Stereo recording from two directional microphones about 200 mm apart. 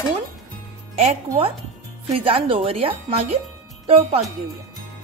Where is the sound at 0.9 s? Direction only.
35° right (ahead or behind).